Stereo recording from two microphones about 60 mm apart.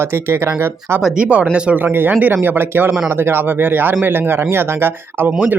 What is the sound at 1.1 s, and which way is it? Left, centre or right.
Speech, centre.